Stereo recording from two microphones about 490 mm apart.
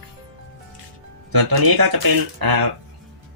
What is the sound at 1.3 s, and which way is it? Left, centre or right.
Speech, right.